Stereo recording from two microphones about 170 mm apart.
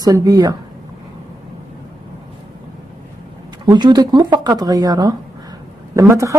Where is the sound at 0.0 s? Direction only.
20° right (ahead or behind).